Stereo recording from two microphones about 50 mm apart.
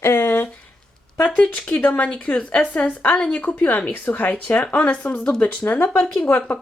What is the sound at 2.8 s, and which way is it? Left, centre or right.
Speech, left.